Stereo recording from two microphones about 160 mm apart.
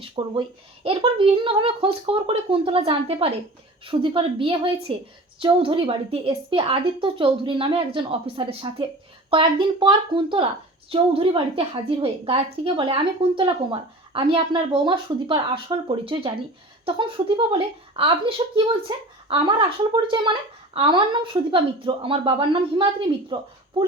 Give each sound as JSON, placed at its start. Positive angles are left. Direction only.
{"t": 0.0, "sound": "speech", "side_deg": -30}